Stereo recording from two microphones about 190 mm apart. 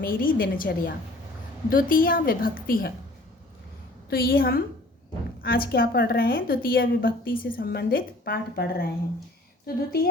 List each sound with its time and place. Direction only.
0.0 s a woman's voice: 50° left (ahead or behind)
4.1 s a woman's voice: 50° left (ahead or behind)